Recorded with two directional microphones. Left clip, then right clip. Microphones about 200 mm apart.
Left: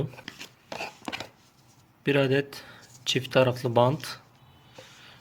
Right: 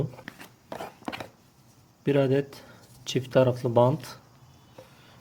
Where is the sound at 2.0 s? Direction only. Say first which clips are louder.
Even; 5° right (ahead or behind).